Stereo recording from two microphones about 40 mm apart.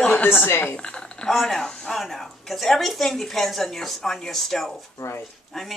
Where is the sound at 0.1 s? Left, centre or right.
Left.